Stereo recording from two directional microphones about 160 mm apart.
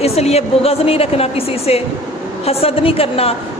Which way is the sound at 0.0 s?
40° left (ahead or behind).